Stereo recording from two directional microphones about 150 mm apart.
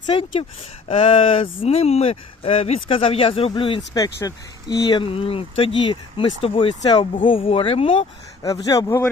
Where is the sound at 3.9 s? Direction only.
25° left (ahead or behind); by 8.1 s 40° left (ahead or behind).